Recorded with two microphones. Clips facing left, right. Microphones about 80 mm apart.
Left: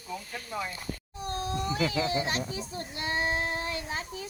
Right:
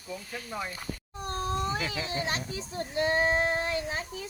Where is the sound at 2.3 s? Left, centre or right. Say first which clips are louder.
Left 1 dB; right.